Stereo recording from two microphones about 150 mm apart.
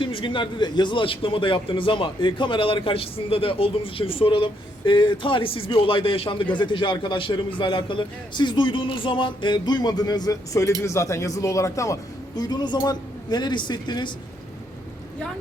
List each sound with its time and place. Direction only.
0.0 s a man's voice: 35° left (ahead or behind)